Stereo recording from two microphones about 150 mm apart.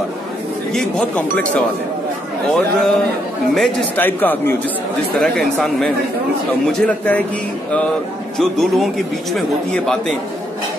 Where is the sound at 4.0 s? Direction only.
15° left (ahead or behind).